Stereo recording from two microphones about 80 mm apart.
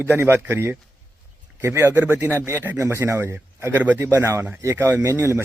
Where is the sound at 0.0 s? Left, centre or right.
Right.